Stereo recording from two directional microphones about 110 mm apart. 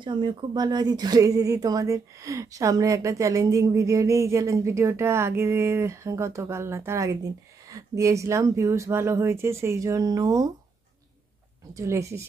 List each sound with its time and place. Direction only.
0.0 s speech: 45° right (ahead or behind)
11.7 s speech: 30° right (ahead or behind)